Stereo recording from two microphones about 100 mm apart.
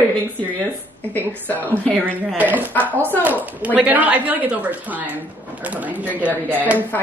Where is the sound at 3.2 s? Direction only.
15° right (ahead or behind).